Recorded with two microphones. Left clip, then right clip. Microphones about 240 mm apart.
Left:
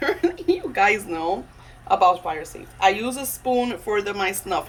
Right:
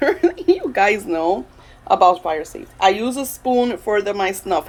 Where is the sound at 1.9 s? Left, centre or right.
Right.